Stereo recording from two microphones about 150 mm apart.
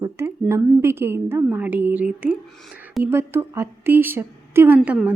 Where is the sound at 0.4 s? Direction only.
20° right (ahead or behind).